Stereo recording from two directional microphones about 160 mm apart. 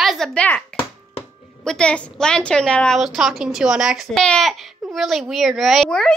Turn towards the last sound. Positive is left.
turn(degrees=5)  # may be behind; listen again after turning